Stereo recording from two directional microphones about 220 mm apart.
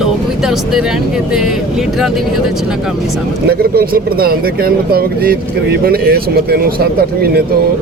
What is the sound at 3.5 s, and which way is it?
Speech, 45° right (ahead or behind).